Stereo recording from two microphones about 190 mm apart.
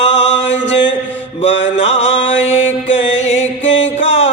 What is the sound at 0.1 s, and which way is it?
Music, 70° left (ahead or behind).